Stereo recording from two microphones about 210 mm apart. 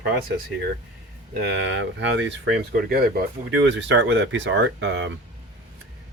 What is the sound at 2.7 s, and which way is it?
Speech, 45° right (ahead or behind).